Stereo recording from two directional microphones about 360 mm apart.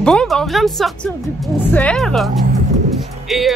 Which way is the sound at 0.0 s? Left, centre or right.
Centre.